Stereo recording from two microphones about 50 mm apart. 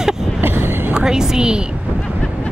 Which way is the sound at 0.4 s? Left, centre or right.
Right.